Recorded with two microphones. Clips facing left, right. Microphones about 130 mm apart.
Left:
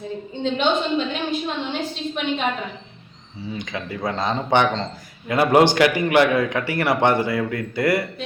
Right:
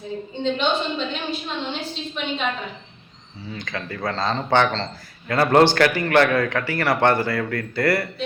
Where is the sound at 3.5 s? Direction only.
20° left (ahead or behind).